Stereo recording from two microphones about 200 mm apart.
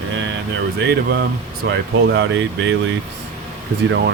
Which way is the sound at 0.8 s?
55° right (ahead or behind).